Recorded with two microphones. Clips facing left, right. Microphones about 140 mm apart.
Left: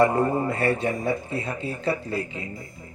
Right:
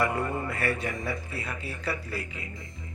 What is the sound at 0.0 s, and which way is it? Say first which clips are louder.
Speech: left 8 dB; 30° left (ahead or behind).